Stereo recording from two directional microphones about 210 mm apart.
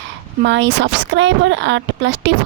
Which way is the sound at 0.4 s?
60° right (ahead or behind).